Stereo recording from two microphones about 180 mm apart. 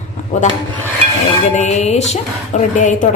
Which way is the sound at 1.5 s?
40° left (ahead or behind).